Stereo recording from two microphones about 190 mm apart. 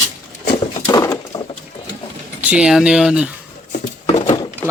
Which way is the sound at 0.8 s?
20° left (ahead or behind).